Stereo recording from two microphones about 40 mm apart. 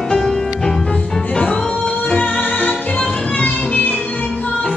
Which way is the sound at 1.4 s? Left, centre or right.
Left.